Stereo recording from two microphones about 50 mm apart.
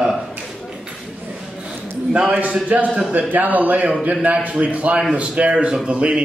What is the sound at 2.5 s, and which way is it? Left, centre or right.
A man's voice, right.